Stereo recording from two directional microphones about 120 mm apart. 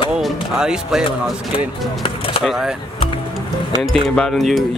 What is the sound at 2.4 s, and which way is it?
Speech, 5° right (ahead or behind).